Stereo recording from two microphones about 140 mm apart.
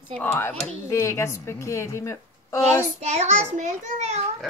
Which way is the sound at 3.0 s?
55° right (ahead or behind).